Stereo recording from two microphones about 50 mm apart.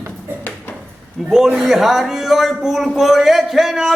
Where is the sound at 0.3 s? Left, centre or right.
Right.